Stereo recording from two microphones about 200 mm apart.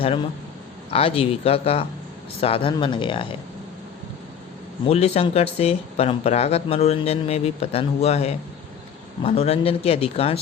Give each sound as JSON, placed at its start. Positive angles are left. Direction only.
{"t": 0.9, "sound": "speech", "side_deg": 30}
{"t": 4.9, "sound": "speech", "side_deg": 30}